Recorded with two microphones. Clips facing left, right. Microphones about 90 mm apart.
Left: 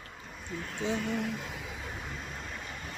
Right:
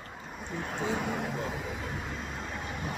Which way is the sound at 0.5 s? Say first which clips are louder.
Right 1 dB; 50° right (ahead or behind).